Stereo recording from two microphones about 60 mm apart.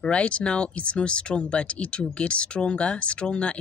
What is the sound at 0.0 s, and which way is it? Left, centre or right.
Speech, centre.